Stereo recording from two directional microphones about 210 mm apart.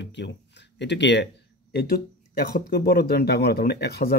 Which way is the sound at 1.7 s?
45° left (ahead or behind).